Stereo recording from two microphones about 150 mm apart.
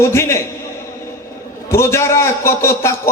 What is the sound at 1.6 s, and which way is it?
A man's voice, 15° left (ahead or behind).